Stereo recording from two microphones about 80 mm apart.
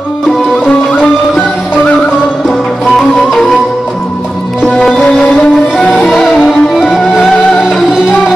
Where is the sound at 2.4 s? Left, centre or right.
Centre.